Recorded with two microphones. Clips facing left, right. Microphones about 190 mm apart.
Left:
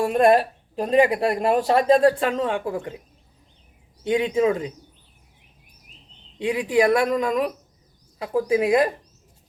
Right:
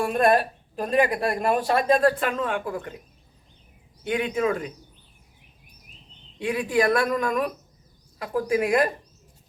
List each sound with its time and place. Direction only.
0.0 s speech: 20° left (ahead or behind)
4.0 s speech: 25° left (ahead or behind)
6.4 s speech: 20° left (ahead or behind)